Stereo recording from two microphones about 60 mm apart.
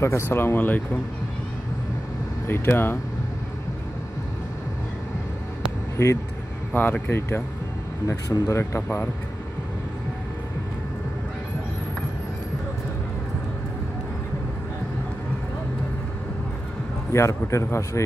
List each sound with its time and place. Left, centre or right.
0.0 s speech: left
2.4 s speech: left
6.7 s speech: left
8.3 s speech: left
8.7 s speech: left
17.1 s speech: left